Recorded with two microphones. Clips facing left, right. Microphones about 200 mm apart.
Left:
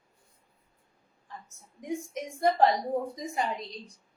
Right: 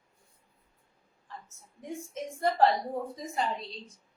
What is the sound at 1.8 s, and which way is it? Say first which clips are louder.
A woman's voice: left 3 dB; 15° left (ahead or behind).